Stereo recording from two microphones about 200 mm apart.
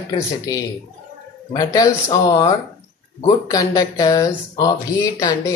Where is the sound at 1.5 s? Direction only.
20° left (ahead or behind).